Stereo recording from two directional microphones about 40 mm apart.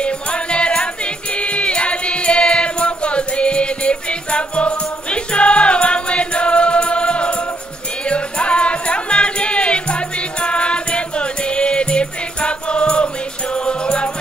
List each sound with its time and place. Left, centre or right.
0.0 s music: left